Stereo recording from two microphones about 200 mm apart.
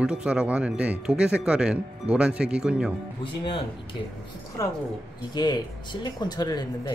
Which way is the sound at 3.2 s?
25° left (ahead or behind).